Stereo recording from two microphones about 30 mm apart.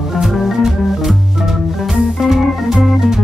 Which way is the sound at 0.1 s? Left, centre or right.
Centre.